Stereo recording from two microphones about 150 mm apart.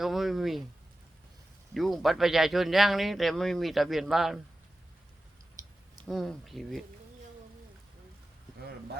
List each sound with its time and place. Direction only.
0.0 s speech: centre (ahead or behind)
1.7 s speech: centre (ahead or behind)
5.6 s a sound: 25° right (ahead or behind)
6.1 s speech: centre (ahead or behind)